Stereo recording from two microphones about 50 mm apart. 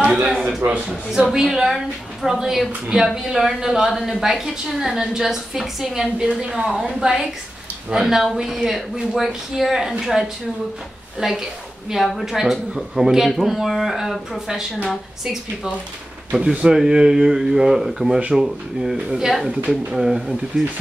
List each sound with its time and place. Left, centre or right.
0.0 s a sound: centre
0.6 s a man's voice: right
1.3 s a woman's voice: centre
16.3 s a woman's voice: centre